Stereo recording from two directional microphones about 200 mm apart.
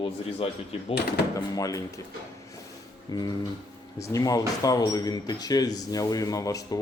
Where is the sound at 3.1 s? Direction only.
20° left (ahead or behind).